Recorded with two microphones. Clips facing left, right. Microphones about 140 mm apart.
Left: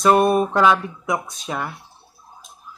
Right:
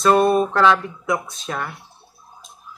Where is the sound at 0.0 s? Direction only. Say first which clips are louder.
Even; 15° left (ahead or behind).